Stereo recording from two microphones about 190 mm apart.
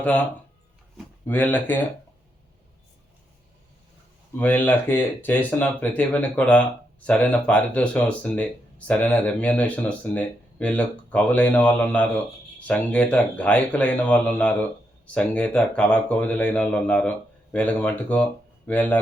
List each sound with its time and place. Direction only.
0.0 s speech: 5° left (ahead or behind)
1.3 s speech: 10° left (ahead or behind)
4.4 s speech: 10° left (ahead or behind)